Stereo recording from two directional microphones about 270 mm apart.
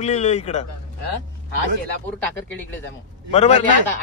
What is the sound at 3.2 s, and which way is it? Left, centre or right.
Speech, left.